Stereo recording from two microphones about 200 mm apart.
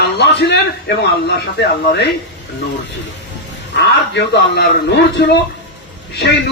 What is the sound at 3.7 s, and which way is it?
Speech, 55° left (ahead or behind).